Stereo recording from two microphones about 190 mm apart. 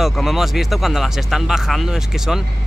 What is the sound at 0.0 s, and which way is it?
Speech, centre (ahead or behind).